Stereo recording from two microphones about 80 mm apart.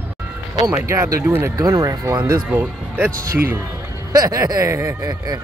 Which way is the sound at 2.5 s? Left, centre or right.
Right.